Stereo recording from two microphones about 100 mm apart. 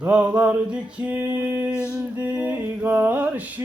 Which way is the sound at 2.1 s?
15° right (ahead or behind).